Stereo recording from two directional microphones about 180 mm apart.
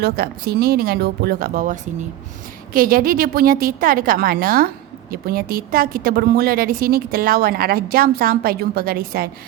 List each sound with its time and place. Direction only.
0.0 s a woman's voice: 60° right (ahead or behind)